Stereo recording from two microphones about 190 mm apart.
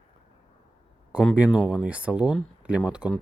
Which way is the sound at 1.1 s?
Centre (ahead or behind).